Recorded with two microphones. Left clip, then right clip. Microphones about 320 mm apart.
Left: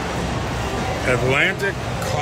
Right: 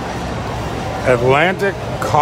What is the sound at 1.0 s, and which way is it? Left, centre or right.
Speech, centre.